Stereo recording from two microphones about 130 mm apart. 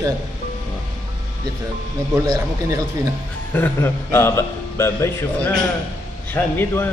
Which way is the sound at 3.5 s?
15° left (ahead or behind).